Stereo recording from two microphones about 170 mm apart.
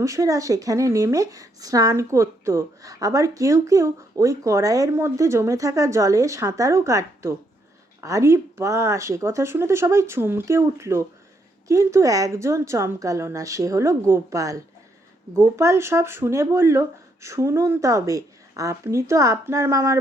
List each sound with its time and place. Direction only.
0.0 s speech: 20° right (ahead or behind)